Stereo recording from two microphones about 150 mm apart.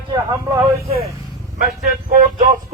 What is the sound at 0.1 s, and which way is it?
Speech, 25° right (ahead or behind).